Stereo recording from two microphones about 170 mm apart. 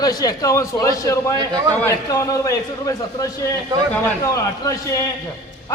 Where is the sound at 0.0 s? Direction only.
20° left (ahead or behind).